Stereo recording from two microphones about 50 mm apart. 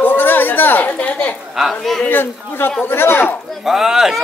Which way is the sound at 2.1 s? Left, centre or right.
Left.